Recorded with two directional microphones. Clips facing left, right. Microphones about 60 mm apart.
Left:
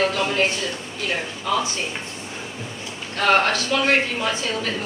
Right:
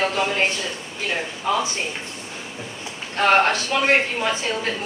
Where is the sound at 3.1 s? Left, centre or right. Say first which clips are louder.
Right 1 dB; right.